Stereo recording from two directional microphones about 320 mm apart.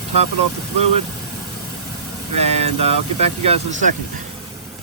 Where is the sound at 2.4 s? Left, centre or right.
Centre.